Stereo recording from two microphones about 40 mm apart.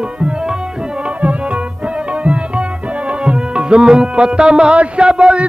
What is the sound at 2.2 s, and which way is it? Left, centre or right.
Tabla, right.